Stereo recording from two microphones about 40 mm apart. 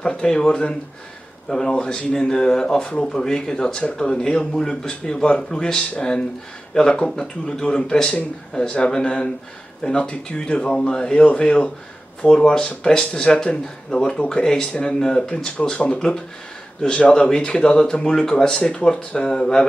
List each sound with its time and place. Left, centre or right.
0.0 s speech: left